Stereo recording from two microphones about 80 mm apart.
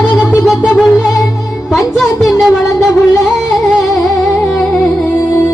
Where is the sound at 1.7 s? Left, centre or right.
Centre.